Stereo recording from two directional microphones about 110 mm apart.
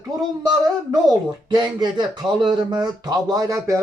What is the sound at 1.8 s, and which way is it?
Speech, 40° right (ahead or behind).